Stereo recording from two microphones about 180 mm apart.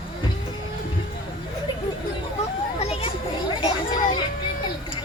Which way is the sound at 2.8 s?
35° left (ahead or behind).